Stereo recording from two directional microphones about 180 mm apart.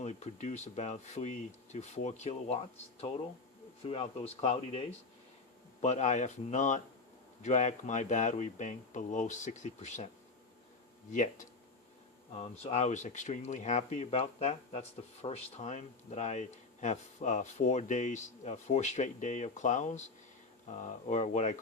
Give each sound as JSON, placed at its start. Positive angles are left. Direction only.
{"t": 0.0, "sound": "speech", "side_deg": 35}
{"t": 11.1, "sound": "speech", "side_deg": 45}